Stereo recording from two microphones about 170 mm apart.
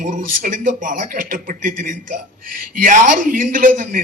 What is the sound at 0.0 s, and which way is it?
A man's voice, 50° right (ahead or behind).